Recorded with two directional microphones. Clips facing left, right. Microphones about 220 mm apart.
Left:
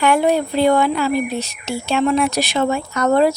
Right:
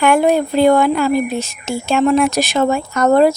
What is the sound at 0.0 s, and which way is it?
Speech, 50° right (ahead or behind).